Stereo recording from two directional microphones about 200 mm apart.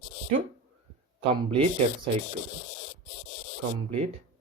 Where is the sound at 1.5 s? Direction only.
25° right (ahead or behind).